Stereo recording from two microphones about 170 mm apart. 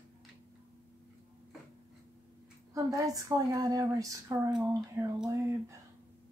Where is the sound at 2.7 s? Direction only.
20° right (ahead or behind).